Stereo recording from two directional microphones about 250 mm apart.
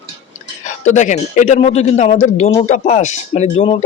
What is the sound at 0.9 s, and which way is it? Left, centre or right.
Speech, left.